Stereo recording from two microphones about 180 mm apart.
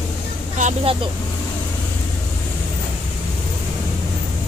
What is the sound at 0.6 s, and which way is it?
Speech, 40° right (ahead or behind).